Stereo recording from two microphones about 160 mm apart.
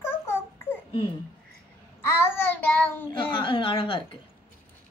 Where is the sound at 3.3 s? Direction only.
30° left (ahead or behind).